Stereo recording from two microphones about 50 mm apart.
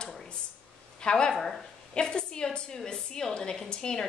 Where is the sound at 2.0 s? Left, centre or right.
Centre.